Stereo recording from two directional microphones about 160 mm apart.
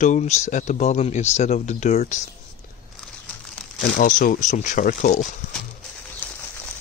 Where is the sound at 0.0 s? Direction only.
45° left (ahead or behind).